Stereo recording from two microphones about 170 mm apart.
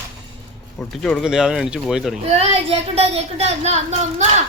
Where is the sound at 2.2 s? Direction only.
35° right (ahead or behind).